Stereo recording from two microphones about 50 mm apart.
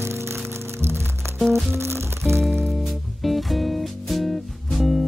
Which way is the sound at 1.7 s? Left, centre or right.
Right.